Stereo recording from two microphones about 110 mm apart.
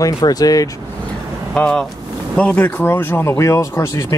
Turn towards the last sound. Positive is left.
turn(degrees=30)  # may be behind; listen again after turning